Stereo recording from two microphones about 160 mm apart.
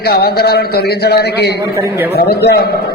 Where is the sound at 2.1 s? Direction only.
85° left.